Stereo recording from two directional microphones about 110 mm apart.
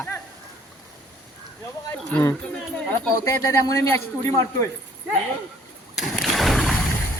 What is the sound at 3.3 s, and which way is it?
Speech, 25° left (ahead or behind).